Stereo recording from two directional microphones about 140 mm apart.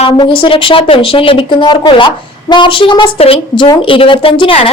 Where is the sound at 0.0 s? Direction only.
35° left (ahead or behind).